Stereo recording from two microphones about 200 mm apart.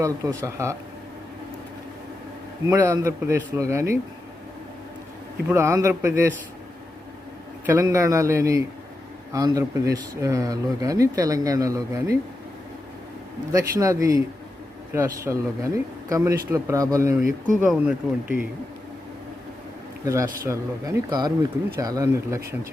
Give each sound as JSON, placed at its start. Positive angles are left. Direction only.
{"t": 0.0, "sound": "speech", "side_deg": -15}
{"t": 2.6, "sound": "speech", "side_deg": -15}
{"t": 5.5, "sound": "speech", "side_deg": -15}
{"t": 7.7, "sound": "speech", "side_deg": -15}
{"t": 13.5, "sound": "speech", "side_deg": -15}
{"t": 17.2, "sound": "speech", "side_deg": -40}
{"t": 17.7, "sound": "speech", "side_deg": -5}
{"t": 20.1, "sound": "speech", "side_deg": -15}